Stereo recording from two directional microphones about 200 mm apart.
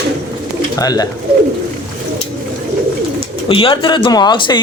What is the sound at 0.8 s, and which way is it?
Speech, 20° left (ahead or behind).